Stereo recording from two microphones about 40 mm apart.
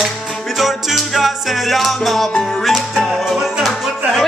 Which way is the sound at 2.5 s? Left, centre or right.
Centre.